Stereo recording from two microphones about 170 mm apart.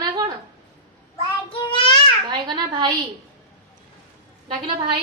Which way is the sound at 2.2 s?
25° right (ahead or behind).